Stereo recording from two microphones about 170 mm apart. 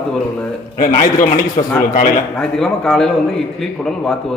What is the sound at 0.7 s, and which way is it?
Speech, 50° left (ahead or behind).